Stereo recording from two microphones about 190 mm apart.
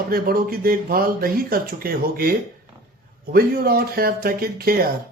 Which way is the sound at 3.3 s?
50° right (ahead or behind).